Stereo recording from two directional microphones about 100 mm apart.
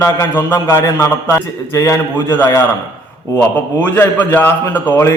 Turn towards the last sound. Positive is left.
turn(degrees=25)  # may be behind; listen again after turning